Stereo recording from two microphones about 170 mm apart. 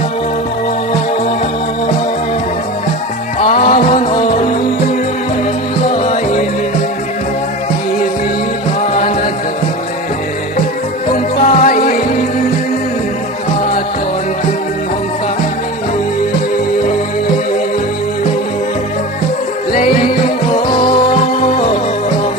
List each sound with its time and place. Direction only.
3.4 s music: 45° left (ahead or behind)
8.9 s music: 45° left (ahead or behind)
11.4 s music: 50° left (ahead or behind)
19.7 s music: 50° left (ahead or behind)